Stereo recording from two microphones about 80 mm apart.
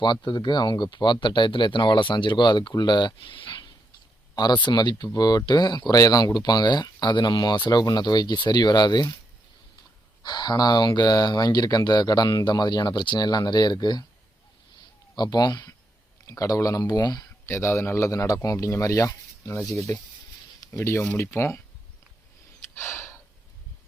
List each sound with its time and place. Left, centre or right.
0.0 s speech: left
4.4 s speech: left
5.9 s speech: left
10.2 s speech: left
15.1 s speech: left
16.2 s speech: left
17.4 s a man's voice: left
22.7 s gasp: left